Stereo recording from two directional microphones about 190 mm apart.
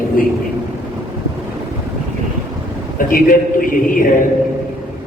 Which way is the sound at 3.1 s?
45° left (ahead or behind).